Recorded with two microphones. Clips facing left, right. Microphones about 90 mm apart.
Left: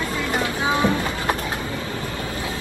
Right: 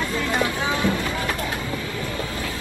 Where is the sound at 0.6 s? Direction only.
20° left (ahead or behind).